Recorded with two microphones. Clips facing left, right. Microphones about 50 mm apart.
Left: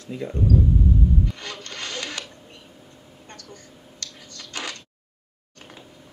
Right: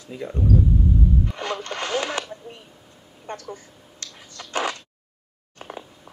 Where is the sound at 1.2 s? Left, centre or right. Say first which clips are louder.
Right 4 dB; centre.